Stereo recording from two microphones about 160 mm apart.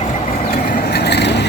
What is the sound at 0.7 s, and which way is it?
Vehicle, 85° left.